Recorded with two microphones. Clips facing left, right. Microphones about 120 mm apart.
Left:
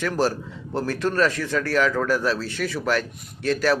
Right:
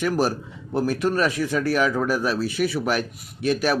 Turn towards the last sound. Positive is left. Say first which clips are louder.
# even
turn(degrees=-15)  # may be behind; listen again after turning